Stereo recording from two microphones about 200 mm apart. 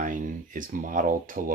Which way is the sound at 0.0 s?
40° right (ahead or behind).